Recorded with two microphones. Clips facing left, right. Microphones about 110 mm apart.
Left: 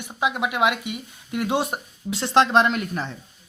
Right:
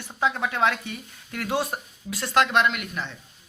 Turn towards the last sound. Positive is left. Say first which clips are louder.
# left 3 dB
turn(degrees=35)  # may be behind; listen again after turning